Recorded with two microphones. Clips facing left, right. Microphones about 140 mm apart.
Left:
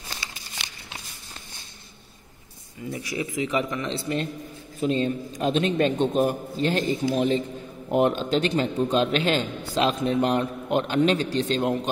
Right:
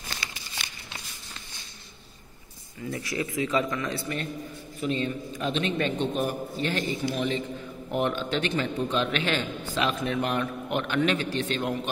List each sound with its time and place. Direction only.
2.9 s a man's voice: 15° left (ahead or behind)
4.7 s speech: 35° left (ahead or behind)